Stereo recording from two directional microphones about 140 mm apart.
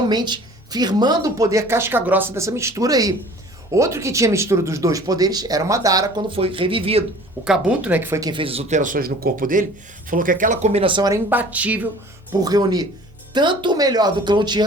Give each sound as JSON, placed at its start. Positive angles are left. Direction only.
{"t": 0.1, "sound": "speech", "side_deg": -30}
{"t": 6.3, "sound": "speech", "side_deg": -40}
{"t": 7.4, "sound": "speech", "side_deg": -5}
{"t": 8.3, "sound": "speech", "side_deg": -40}
{"t": 8.7, "sound": "speech", "side_deg": -70}
{"t": 11.1, "sound": "speech", "side_deg": -15}
{"t": 12.4, "sound": "speech", "side_deg": -25}